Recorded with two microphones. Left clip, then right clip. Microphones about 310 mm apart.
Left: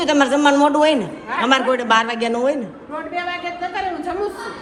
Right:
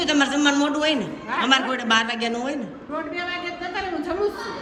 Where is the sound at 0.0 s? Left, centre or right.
Centre.